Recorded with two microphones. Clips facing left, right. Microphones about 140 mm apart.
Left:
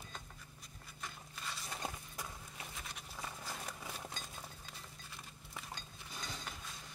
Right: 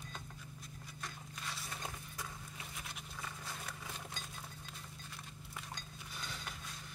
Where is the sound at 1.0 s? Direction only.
Centre (ahead or behind).